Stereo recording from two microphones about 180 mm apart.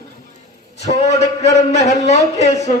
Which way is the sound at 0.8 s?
40° left (ahead or behind).